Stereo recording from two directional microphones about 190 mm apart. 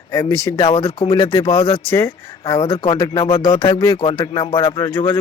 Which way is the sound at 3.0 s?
25° left (ahead or behind).